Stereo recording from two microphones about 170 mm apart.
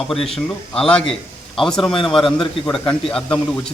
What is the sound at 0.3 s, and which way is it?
A man's voice, centre (ahead or behind).